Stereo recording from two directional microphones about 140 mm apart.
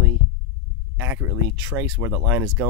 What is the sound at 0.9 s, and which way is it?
Speech, 15° right (ahead or behind).